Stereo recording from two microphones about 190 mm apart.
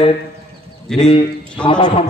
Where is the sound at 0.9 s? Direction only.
5° left (ahead or behind).